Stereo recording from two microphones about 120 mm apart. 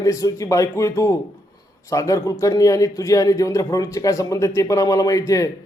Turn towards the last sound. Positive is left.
turn(degrees=30)  # may be behind; listen again after turning